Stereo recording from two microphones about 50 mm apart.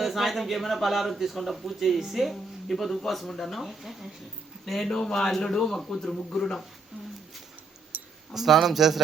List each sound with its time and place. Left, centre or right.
0.0 s a man's voice: centre
7.9 s a sound: right
8.3 s a man's voice: centre